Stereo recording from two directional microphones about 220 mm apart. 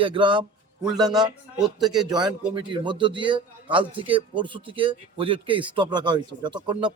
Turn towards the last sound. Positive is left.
turn(degrees=-20)  # may be behind; listen again after turning